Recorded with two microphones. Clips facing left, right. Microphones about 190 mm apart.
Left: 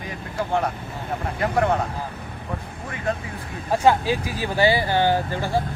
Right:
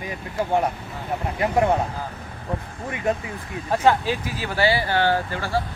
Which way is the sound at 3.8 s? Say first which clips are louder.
Left 1 dB; 10° left (ahead or behind).